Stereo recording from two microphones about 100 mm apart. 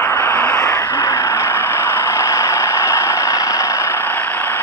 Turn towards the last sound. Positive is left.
turn(degrees=15)  # may be behind; listen again after turning